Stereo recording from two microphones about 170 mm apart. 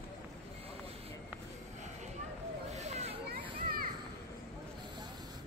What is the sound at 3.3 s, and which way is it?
Children playing, 60° right (ahead or behind).